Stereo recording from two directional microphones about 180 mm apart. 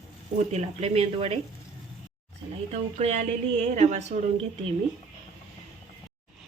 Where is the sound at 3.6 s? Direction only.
40° right (ahead or behind).